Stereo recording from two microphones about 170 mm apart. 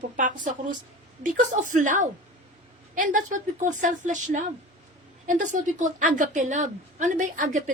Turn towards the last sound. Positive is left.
turn(degrees=-50)  # may be behind; listen again after turning